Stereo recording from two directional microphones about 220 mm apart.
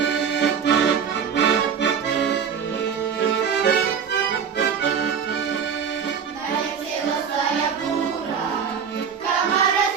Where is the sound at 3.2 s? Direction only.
50° left (ahead or behind).